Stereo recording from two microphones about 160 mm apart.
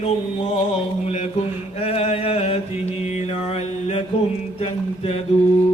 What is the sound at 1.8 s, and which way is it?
Mantra, 40° left (ahead or behind).